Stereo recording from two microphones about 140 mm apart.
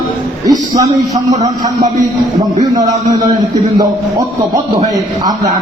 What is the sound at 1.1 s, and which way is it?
Speech, 55° right (ahead or behind).